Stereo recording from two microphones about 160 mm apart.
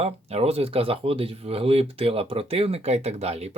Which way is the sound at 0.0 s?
40° right (ahead or behind).